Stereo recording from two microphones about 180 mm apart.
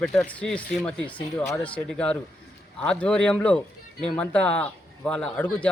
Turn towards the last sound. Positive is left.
turn(degrees=5)  # may be behind; listen again after turning